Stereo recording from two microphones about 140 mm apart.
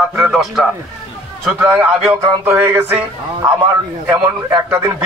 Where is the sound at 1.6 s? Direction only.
10° right (ahead or behind).